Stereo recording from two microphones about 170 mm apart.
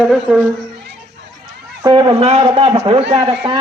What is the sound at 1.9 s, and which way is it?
Speech, 30° right (ahead or behind).